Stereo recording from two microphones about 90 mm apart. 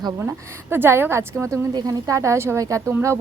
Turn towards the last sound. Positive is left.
turn(degrees=-25)  # may be behind; listen again after turning